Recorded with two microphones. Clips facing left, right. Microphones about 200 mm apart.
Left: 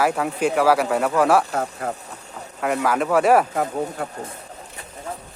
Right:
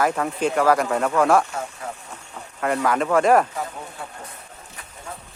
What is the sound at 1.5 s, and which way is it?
Speech, 65° left (ahead or behind).